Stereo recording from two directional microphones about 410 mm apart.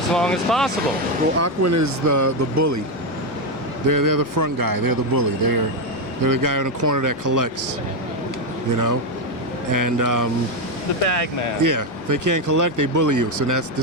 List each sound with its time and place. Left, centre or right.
0.1 s speech: centre
1.4 s speech: right
3.8 s speech: right
9.7 s speech: right
11.0 s speech: left
11.6 s speech: right